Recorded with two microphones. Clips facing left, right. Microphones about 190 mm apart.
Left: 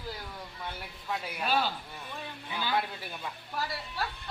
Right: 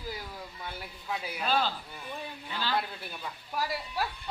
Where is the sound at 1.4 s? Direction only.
10° left (ahead or behind).